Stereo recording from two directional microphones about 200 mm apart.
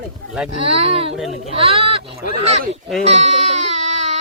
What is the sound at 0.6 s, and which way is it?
Speech, 30° right (ahead or behind).